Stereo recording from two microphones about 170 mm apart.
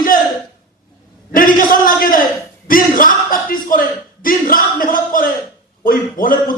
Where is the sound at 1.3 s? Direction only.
55° left (ahead or behind).